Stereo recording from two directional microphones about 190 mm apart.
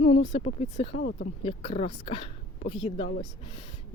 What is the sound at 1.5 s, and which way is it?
Speech, 30° left (ahead or behind).